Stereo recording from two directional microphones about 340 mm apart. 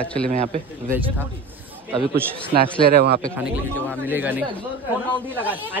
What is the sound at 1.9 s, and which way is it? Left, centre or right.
Speech, centre.